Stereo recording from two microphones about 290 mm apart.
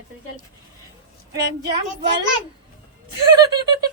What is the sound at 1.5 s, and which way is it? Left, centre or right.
Speech, centre.